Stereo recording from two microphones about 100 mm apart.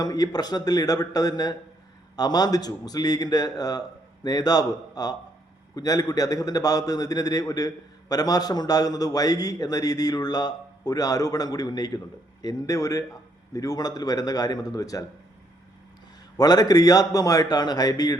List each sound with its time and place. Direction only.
0.0 s a man's voice: 35° left (ahead or behind)
16.4 s a man's voice: 40° left (ahead or behind)